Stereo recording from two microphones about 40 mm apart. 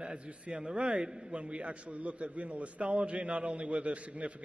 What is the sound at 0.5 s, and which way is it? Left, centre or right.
A man's voice, right.